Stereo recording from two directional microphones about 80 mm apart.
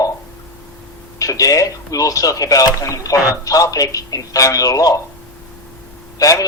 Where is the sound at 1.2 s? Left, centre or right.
Left.